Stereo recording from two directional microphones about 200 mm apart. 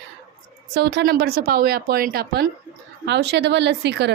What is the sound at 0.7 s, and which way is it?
Speech, 55° right (ahead or behind).